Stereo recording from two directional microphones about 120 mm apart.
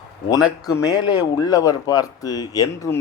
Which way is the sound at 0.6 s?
30° left (ahead or behind).